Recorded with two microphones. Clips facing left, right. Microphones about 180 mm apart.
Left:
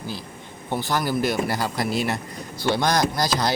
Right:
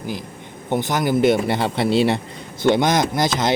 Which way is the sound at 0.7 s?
20° right (ahead or behind).